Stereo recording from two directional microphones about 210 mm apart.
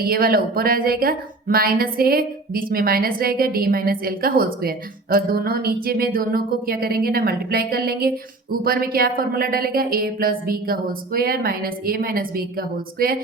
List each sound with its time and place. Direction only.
0.0 s a woman's voice: 45° right (ahead or behind)